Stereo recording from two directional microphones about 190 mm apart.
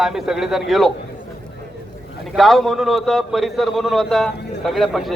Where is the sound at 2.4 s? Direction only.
Centre (ahead or behind).